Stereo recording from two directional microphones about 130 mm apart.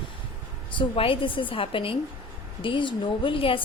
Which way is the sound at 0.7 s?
45° left (ahead or behind).